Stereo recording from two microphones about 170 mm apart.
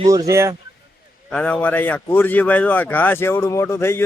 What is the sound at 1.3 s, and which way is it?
A man's voice, 5° left (ahead or behind).